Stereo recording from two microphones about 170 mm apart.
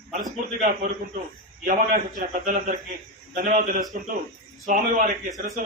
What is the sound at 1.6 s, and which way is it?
A man's voice, 50° right (ahead or behind).